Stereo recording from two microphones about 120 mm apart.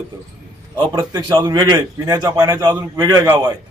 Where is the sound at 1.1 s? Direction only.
40° right (ahead or behind).